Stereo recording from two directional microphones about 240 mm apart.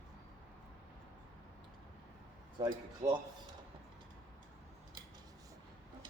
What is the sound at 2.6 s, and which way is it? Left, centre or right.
Speech, centre.